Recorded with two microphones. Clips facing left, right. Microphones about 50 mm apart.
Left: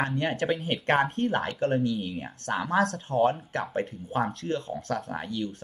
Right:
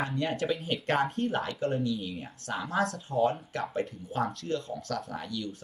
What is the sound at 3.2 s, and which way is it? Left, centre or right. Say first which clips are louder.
Speech: left 3 dB; left.